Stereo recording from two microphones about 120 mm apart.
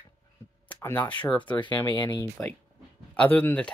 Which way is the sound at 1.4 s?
40° left (ahead or behind).